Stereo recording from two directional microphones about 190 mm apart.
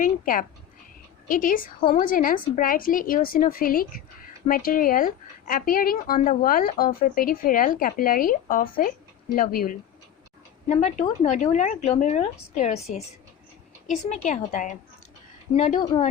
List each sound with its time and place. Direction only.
0.0 s a woman's voice: 45° left (ahead or behind)
1.8 s a woman's voice: 30° left (ahead or behind)
2.0 s a woman's voice: 45° left (ahead or behind)
10.8 s a woman's voice: 40° left (ahead or behind)